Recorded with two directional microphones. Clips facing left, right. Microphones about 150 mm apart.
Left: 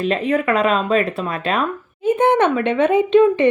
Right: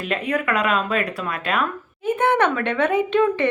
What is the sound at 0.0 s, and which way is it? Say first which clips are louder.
Speech: left 5 dB; 30° left (ahead or behind).